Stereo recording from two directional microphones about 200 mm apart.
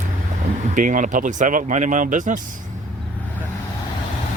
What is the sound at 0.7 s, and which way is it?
Speech, 40° right (ahead or behind).